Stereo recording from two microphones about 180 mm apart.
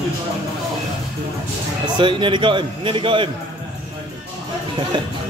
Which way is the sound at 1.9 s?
25° right (ahead or behind).